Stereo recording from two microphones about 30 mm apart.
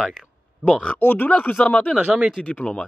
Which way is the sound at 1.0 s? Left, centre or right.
Left.